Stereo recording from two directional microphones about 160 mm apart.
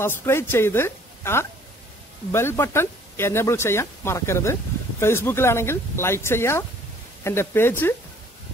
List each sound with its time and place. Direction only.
0.0 s speech: 15° left (ahead or behind)